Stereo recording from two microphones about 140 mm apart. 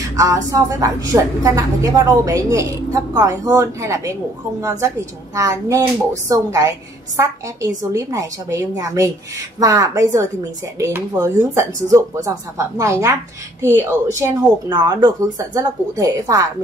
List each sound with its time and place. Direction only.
0.1 s a woman's voice: 25° right (ahead or behind)
14.7 s a woman's voice: 30° right (ahead or behind)